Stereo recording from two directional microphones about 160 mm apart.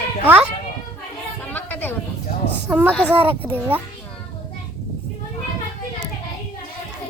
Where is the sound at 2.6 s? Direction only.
10° right (ahead or behind).